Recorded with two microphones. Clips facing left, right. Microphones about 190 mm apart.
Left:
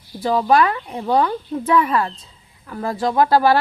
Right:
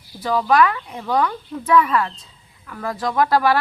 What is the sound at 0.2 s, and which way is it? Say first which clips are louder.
A woman's voice: left 1 dB; 30° left (ahead or behind).